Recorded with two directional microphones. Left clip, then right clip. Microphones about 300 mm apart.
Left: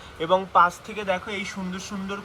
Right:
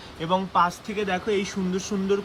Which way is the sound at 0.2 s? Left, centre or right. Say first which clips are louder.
Left 3 dB; centre.